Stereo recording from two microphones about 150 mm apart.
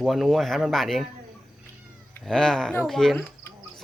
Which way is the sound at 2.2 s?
5° left (ahead or behind).